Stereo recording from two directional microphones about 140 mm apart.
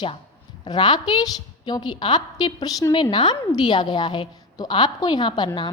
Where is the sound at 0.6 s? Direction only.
35° left (ahead or behind).